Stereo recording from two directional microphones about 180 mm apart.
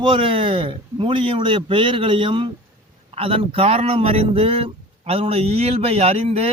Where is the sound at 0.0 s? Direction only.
30° right (ahead or behind).